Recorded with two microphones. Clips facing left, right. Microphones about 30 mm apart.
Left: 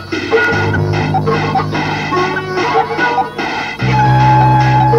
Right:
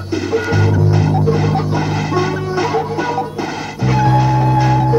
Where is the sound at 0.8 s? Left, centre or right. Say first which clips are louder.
Left 1 dB; left.